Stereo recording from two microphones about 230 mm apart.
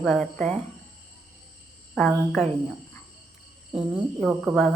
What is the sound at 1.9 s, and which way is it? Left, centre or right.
Speech, centre.